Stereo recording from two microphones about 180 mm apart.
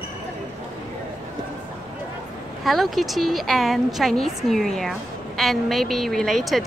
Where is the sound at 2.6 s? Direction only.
Centre (ahead or behind).